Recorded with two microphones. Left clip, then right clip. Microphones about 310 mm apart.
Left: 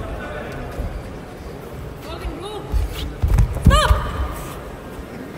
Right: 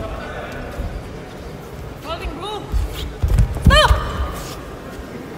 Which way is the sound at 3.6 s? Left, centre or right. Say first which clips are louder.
Right 4 dB; right.